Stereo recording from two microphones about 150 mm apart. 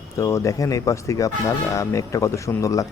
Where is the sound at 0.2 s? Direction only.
20° left (ahead or behind).